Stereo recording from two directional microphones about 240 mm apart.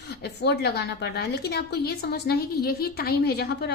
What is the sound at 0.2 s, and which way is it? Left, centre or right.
A woman's voice, left.